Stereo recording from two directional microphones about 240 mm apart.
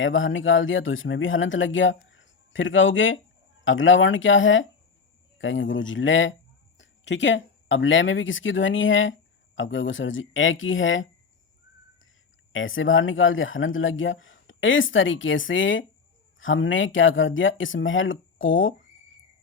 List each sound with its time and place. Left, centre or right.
0.0 s speech: left
12.5 s speech: left